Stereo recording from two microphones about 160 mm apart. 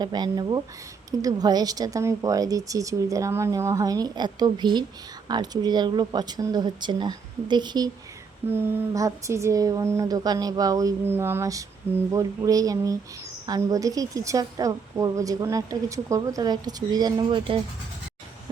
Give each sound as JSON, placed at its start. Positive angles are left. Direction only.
{"t": 0.0, "sound": "a woman's voice", "side_deg": -25}
{"t": 8.4, "sound": "a woman's voice", "side_deg": -15}